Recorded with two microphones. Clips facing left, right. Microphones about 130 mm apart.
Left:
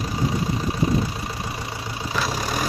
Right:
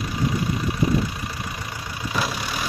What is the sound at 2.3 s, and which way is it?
Vehicle, 40° left (ahead or behind).